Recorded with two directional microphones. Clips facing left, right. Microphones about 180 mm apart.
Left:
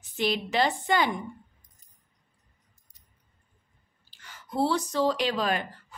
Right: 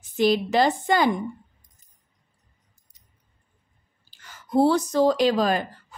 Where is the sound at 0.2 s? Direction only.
40° right (ahead or behind).